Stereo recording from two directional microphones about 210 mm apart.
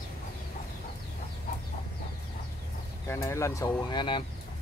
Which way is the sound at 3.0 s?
10° left (ahead or behind).